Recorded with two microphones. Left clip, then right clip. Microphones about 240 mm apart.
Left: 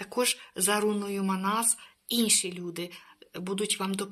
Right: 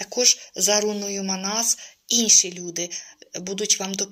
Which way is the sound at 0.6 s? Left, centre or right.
Left.